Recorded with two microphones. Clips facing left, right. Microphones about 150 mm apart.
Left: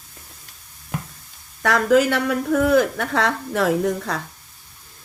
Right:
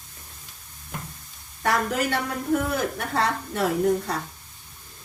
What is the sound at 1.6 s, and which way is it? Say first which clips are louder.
A woman's voice: left 8 dB; 90° left.